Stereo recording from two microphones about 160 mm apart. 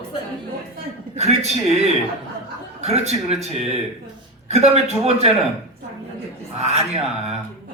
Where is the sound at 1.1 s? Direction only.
40° right (ahead or behind).